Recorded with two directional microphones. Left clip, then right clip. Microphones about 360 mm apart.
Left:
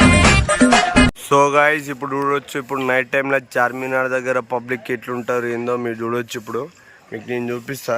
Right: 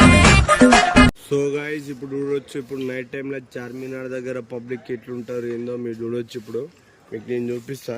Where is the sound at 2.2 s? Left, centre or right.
Centre.